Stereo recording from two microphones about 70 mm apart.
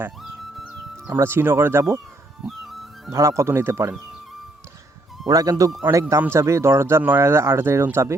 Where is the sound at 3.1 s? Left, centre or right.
Right.